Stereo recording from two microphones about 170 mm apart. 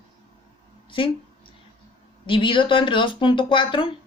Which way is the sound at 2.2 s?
30° left (ahead or behind).